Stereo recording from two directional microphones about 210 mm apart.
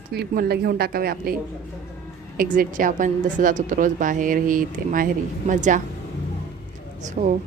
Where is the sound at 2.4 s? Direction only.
40° right (ahead or behind).